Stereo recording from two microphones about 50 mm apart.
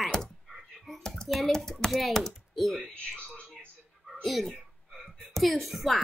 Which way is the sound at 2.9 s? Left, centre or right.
Left.